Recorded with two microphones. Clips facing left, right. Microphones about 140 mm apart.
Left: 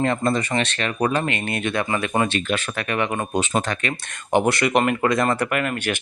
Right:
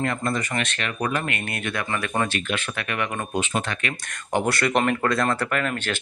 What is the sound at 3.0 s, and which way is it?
Speech, 20° left (ahead or behind).